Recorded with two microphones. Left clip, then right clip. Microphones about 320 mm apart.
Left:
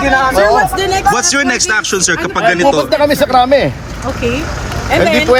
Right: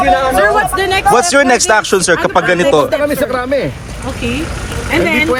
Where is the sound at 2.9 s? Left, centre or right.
Centre.